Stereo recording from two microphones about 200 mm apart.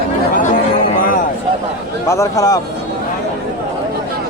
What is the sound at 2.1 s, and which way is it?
Speech, 15° left (ahead or behind).